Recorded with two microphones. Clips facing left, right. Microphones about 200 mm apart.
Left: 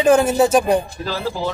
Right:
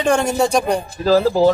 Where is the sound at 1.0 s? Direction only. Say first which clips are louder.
Right 10 dB; 40° right (ahead or behind).